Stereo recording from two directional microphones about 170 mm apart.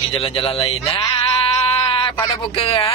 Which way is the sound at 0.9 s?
30° left (ahead or behind).